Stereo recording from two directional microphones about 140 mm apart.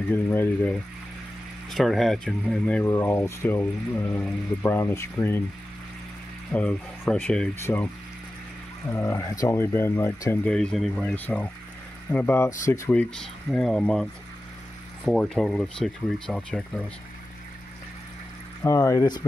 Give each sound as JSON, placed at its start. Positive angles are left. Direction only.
{"t": 0.1, "sound": "speech", "side_deg": 15}
{"t": 1.7, "sound": "speech", "side_deg": 0}
{"t": 6.5, "sound": "speech", "side_deg": 10}
{"t": 10.5, "sound": "speech", "side_deg": 5}
{"t": 12.9, "sound": "speech", "side_deg": 5}
{"t": 15.0, "sound": "speech", "side_deg": 5}
{"t": 18.6, "sound": "speech", "side_deg": 20}